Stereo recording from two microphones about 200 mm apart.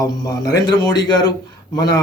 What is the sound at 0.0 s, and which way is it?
Speech, 20° left (ahead or behind).